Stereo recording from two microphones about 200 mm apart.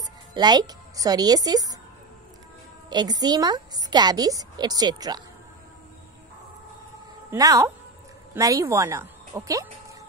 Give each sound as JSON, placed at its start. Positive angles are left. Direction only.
{"t": 0.0, "sound": "a woman's voice", "side_deg": -20}
{"t": 2.9, "sound": "a woman's voice", "side_deg": -20}
{"t": 7.2, "sound": "speech", "side_deg": -15}